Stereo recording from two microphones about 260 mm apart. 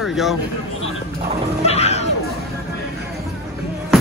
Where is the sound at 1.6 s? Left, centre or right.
Left.